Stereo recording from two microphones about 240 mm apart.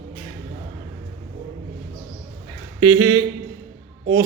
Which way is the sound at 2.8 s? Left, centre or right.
Centre.